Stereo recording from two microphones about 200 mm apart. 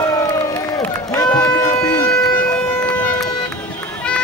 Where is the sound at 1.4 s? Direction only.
15° left (ahead or behind).